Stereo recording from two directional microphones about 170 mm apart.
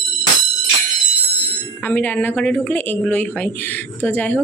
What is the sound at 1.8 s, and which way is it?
A woman's voice, 10° left (ahead or behind).